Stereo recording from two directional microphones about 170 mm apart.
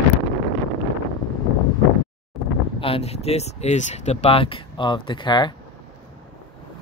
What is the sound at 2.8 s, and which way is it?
Speech, 35° left (ahead or behind).